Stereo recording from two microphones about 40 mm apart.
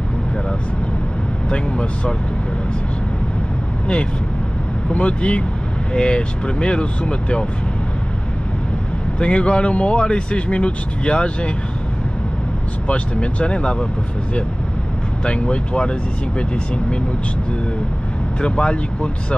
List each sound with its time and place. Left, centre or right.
1.5 s speech: left
3.8 s speech: left
9.2 s speech: left
12.8 s speech: left
15.2 s speech: left
18.4 s speech: left